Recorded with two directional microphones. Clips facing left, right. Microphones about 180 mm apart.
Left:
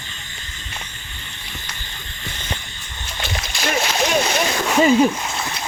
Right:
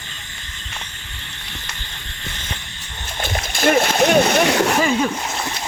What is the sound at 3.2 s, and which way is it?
Splash, 50° right (ahead or behind).